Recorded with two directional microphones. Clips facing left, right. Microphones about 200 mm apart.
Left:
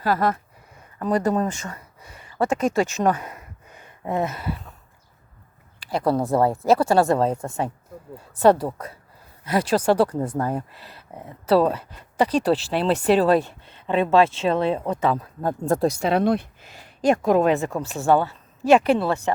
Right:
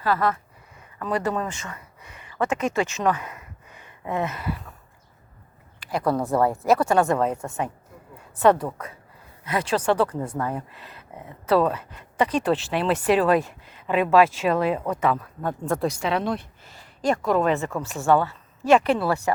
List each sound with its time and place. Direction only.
0.0 s speech: 40° left (ahead or behind)
5.8 s speech: 30° left (ahead or behind); by 16.4 s 50° left (ahead or behind)
17.7 s speech: 30° left (ahead or behind)